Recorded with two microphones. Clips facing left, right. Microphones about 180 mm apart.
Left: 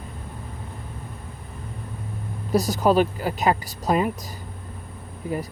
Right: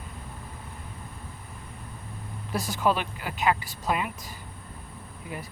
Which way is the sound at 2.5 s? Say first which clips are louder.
Left 7 dB; 40° left (ahead or behind).